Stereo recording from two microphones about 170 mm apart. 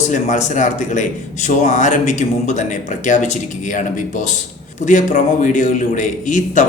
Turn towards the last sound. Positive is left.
turn(degrees=50)  # may be behind; listen again after turning